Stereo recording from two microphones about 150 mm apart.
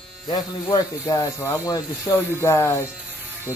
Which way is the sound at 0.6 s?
25° left (ahead or behind).